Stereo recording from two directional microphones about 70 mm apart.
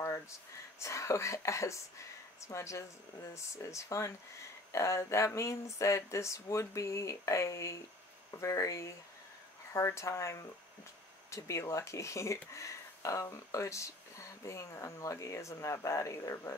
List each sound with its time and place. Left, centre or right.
0.7 s speech: left